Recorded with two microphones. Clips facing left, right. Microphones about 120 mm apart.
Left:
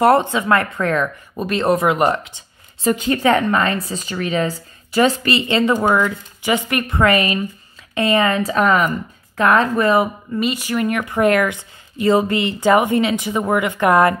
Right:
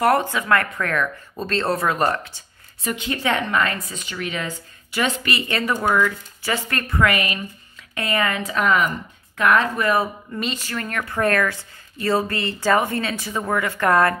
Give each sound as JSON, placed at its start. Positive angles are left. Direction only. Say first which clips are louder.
{"t": 0.0, "sound": "speech", "louder": "left 5 dB", "side_deg": 25}
{"t": 2.8, "sound": "a woman's voice", "louder": "left 9 dB", "side_deg": 35}
{"t": 3.1, "sound": "a woman's voice", "louder": "left 6 dB", "side_deg": 45}
{"t": 5.4, "sound": "speech", "louder": "left 7 dB", "side_deg": 20}
{"t": 7.0, "sound": "a woman's voice", "louder": "left 4 dB", "side_deg": 30}
{"t": 10.3, "sound": "speech", "louder": "left 10 dB", "side_deg": 10}